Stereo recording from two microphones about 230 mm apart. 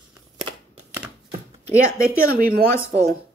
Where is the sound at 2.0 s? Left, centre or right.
Right.